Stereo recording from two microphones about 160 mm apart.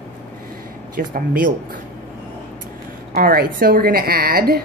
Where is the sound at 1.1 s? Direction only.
60° right (ahead or behind).